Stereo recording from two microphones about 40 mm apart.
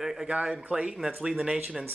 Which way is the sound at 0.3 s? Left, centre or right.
Right.